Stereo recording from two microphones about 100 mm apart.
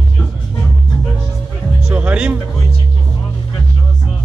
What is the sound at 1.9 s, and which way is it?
Music, 15° right (ahead or behind).